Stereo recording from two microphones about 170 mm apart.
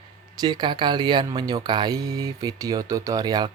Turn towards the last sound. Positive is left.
turn(degrees=-25)  # may be behind; listen again after turning